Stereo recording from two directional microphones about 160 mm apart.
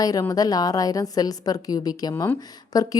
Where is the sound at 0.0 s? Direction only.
20° left (ahead or behind).